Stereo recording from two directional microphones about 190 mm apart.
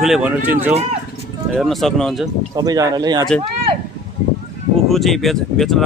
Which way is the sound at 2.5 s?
20° right (ahead or behind).